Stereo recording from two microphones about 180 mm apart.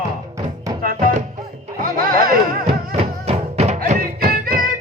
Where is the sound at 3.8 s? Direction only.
55° right (ahead or behind).